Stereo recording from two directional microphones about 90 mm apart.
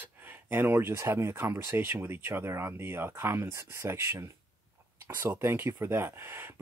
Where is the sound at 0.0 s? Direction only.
20° right (ahead or behind).